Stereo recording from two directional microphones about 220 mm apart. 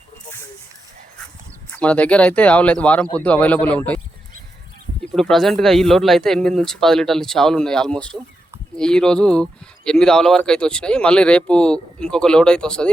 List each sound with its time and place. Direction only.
1.8 s speech: 5° left (ahead or behind)
5.1 s speech: centre (ahead or behind)